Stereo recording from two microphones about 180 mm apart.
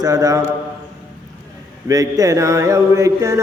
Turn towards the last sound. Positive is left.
turn(degrees=-15)  # may be behind; listen again after turning